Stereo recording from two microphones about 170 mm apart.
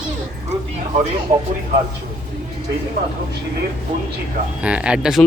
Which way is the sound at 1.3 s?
45° right (ahead or behind).